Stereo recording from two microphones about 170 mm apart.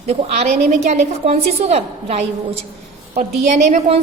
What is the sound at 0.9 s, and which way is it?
A woman's voice, 40° right (ahead or behind).